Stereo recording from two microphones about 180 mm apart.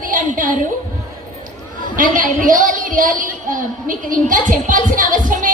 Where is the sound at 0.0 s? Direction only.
50° right (ahead or behind).